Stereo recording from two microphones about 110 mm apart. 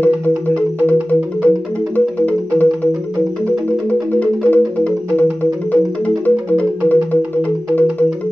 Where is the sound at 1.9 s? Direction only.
15° left (ahead or behind).